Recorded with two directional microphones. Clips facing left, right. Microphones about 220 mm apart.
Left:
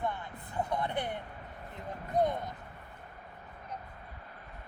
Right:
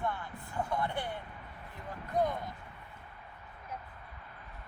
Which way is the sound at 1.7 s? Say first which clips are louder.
Left 2 dB; 20° left (ahead or behind).